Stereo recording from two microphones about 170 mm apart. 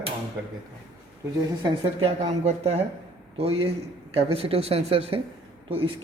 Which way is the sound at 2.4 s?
40° right (ahead or behind).